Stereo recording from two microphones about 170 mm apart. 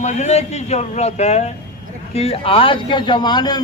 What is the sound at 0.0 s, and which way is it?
A man's voice, 40° left (ahead or behind).